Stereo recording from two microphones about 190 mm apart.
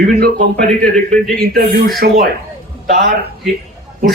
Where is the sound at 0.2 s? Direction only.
50° right (ahead or behind).